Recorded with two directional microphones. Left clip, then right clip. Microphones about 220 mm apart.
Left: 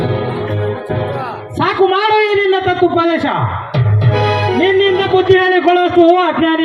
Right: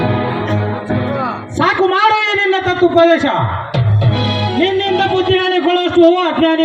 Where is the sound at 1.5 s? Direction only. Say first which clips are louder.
Even; 50° right (ahead or behind).